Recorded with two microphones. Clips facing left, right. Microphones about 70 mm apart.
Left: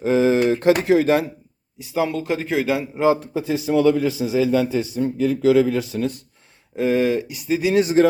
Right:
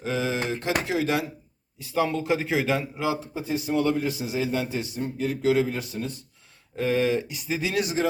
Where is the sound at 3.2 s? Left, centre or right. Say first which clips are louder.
Left 6 dB; left.